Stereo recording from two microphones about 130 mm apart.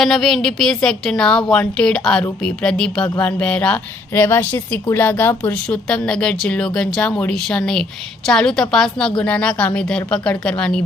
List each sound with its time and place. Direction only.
0.0 s a woman's voice: centre (ahead or behind)